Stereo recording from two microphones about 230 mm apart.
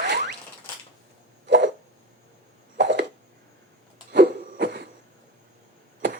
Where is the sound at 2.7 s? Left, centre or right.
Right.